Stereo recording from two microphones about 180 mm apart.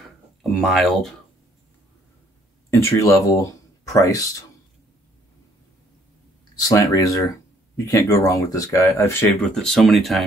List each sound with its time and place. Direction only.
0.4 s speech: centre (ahead or behind)
2.7 s speech: 15° left (ahead or behind)
6.7 s speech: 20° left (ahead or behind)
9.3 s speech: centre (ahead or behind)